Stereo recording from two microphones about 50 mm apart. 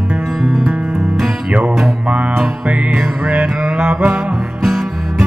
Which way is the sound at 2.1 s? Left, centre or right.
Right.